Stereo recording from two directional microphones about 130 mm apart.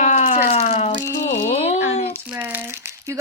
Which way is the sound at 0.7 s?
50° left (ahead or behind).